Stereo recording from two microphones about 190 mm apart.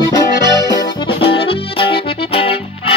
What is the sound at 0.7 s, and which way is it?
Music, 25° left (ahead or behind).